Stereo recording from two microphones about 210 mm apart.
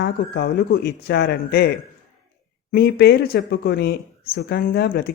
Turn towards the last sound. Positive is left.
turn(degrees=50)  # may be behind; listen again after turning